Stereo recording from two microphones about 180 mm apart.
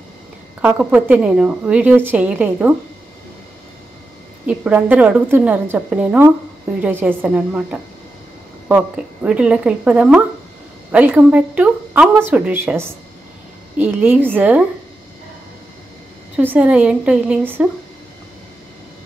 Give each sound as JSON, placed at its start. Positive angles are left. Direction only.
{"t": 0.6, "sound": "a woman's voice", "side_deg": -10}
{"t": 4.5, "sound": "a woman's voice", "side_deg": -10}
{"t": 16.3, "sound": "a woman's voice", "side_deg": -10}